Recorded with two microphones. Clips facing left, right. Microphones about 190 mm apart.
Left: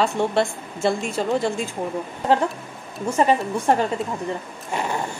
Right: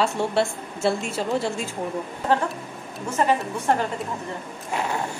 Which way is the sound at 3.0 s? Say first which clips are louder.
Left 3 dB; 15° left (ahead or behind).